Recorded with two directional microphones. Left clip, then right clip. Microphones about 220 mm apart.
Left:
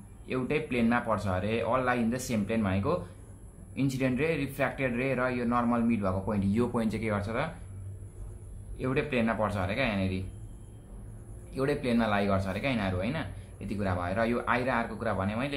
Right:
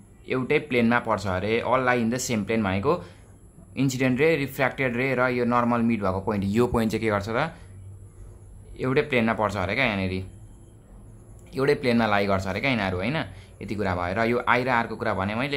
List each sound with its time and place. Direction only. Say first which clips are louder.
0.3 s speech: right 7 dB; 40° right (ahead or behind)
8.7 s speech: right 7 dB; 40° right (ahead or behind)
11.5 s speech: right 7 dB; 40° right (ahead or behind)